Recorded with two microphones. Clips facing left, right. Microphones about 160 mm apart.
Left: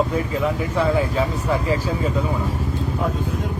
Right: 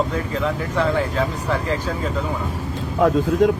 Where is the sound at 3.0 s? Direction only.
90° right.